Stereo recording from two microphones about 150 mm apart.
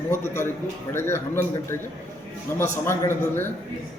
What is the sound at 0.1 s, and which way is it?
A man's voice, 15° left (ahead or behind).